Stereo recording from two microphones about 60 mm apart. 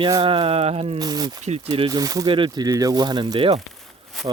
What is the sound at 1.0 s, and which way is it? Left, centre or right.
Speech, right.